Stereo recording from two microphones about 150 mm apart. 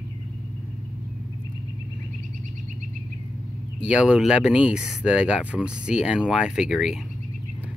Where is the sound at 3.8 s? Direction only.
5° right (ahead or behind).